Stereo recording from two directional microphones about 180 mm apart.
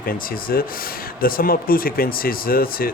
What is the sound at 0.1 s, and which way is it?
Speech, 55° left (ahead or behind).